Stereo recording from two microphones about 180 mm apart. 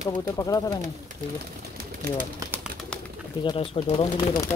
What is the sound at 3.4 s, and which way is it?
Speech, 25° left (ahead or behind).